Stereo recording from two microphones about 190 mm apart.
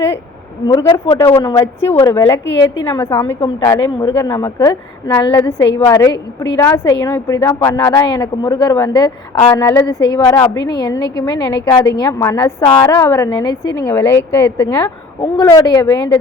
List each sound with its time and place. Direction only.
0.7 s a woman's voice: 15° left (ahead or behind)